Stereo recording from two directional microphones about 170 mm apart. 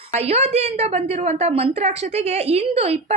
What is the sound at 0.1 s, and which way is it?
A woman's voice, 40° right (ahead or behind).